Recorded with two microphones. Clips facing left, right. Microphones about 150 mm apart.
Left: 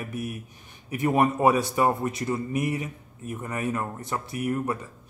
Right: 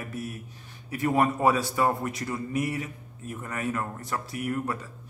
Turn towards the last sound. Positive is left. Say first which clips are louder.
# left 3 dB
turn(degrees=20)  # may be behind; listen again after turning